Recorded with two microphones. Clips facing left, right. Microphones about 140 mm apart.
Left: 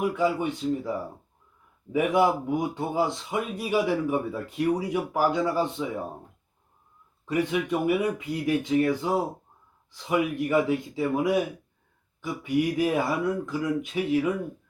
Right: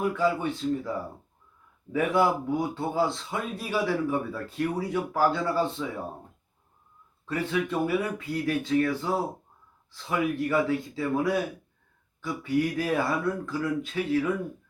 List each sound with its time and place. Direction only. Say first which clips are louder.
0.0 s speech: left 1 dB; 15° left (ahead or behind)
7.3 s speech: left 3 dB; 15° left (ahead or behind)